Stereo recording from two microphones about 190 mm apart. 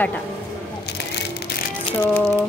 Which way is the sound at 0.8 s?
60° left (ahead or behind).